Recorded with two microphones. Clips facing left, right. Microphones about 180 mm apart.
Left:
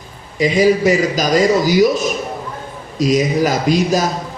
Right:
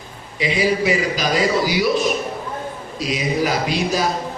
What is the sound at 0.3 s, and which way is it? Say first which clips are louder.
A man's voice: left 6 dB; 45° left (ahead or behind).